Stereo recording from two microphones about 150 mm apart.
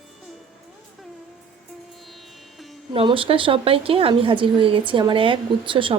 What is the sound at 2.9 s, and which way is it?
A woman's voice, 35° right (ahead or behind).